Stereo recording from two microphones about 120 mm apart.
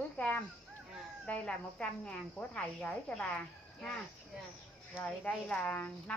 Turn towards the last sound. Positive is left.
turn(degrees=10)  # may be behind; listen again after turning